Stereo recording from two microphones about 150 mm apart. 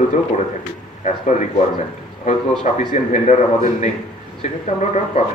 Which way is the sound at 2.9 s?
50° left (ahead or behind).